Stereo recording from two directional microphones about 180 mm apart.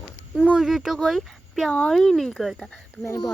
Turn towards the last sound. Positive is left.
turn(degrees=20)  # may be behind; listen again after turning